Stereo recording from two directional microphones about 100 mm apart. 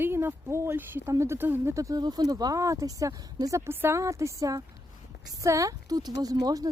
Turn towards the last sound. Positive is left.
turn(degrees=-40)  # may be behind; listen again after turning